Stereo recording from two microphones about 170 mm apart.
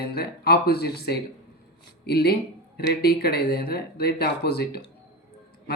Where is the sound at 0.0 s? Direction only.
65° left (ahead or behind).